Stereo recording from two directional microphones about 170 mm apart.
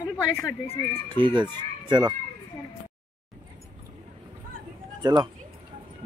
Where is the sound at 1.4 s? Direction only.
25° right (ahead or behind).